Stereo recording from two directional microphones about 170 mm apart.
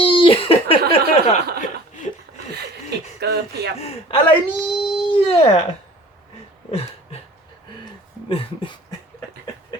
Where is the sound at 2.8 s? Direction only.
75° right (ahead or behind).